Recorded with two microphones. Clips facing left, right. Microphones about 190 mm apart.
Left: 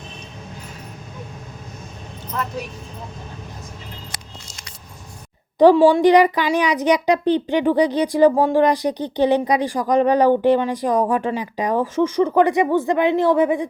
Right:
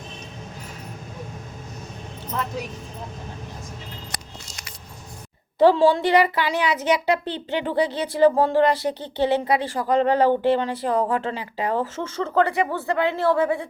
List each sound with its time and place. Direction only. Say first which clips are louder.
5.5 s speech: left 4 dB; 15° left (ahead or behind)